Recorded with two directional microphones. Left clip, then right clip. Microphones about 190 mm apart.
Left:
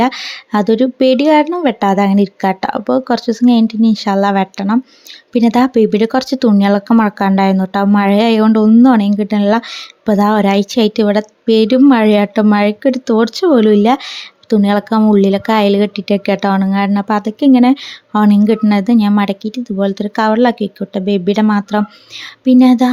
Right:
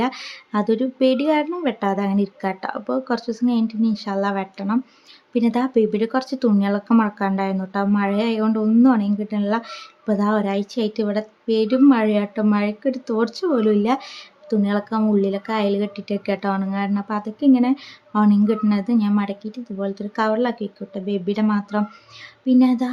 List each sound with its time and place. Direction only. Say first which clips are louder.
0.0 s a woman's voice: left 9 dB; 40° left (ahead or behind)